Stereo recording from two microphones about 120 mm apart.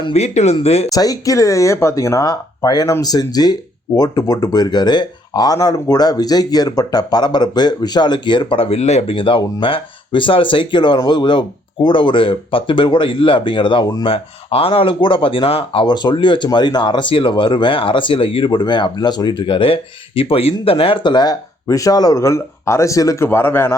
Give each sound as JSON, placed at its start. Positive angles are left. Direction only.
{"t": 0.1, "sound": "speech", "side_deg": 65}
{"t": 0.9, "sound": "speech", "side_deg": 30}